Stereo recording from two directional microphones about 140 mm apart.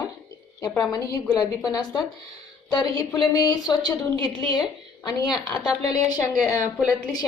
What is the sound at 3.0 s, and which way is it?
A woman's voice, 30° left (ahead or behind).